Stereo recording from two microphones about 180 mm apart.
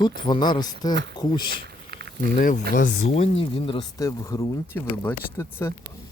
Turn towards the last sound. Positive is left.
turn(degrees=15)  # may be behind; listen again after turning